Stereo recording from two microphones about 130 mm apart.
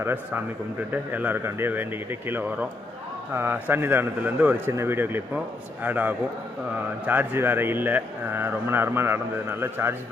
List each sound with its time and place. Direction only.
0.0 s speech: 15° right (ahead or behind)